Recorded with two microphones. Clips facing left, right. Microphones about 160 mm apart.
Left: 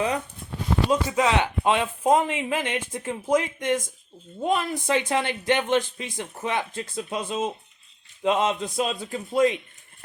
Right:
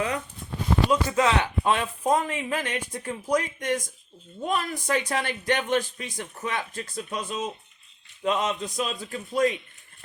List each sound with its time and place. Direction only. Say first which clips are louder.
0.9 s speech: left 1 dB; 20° left (ahead or behind)